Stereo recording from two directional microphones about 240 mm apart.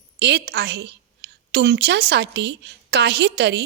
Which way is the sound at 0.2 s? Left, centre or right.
Right.